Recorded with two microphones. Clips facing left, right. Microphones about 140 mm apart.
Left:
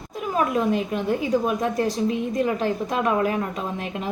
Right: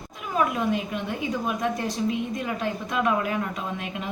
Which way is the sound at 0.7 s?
40° left (ahead or behind).